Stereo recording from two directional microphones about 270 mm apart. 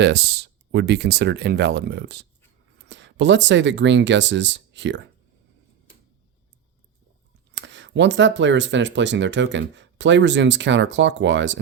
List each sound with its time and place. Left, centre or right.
0.0 s speech: right
7.5 s speech: right